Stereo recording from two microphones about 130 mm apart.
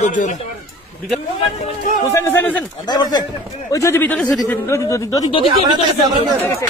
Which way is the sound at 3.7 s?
20° left (ahead or behind).